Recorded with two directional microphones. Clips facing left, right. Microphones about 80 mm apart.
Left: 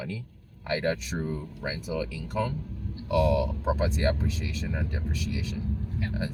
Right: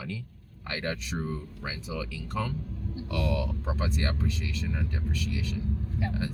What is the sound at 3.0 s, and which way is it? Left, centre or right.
Speech, centre.